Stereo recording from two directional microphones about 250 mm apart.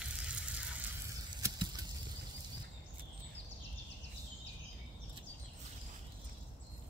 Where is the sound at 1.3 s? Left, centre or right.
Centre.